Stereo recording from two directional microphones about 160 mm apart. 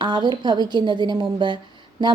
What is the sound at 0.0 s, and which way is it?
A woman's voice, 30° right (ahead or behind).